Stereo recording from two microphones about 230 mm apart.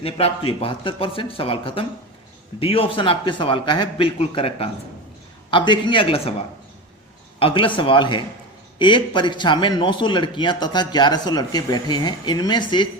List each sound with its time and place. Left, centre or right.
0.0 s a man's voice: left
7.3 s a man's voice: left